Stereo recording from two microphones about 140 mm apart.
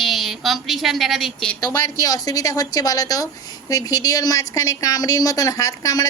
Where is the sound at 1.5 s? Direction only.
25° left (ahead or behind).